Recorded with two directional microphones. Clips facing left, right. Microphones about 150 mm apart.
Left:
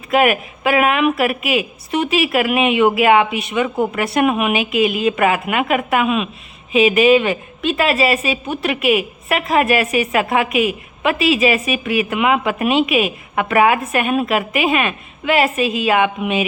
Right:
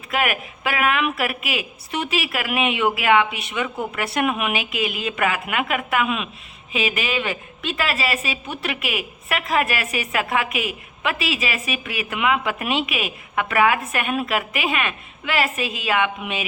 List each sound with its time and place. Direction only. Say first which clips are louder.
0.1 s a woman's voice: left 8 dB; 25° left (ahead or behind)